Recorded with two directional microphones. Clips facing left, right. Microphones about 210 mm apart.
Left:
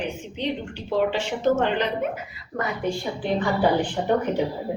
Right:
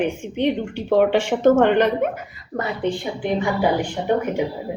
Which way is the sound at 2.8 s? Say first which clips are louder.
Right 3 dB; 15° right (ahead or behind).